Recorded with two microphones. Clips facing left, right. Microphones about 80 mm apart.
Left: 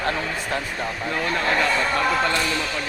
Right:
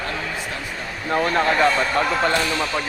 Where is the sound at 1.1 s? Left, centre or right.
Right.